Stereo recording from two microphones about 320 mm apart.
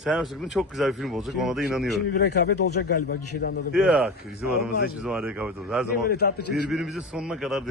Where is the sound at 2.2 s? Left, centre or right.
Left.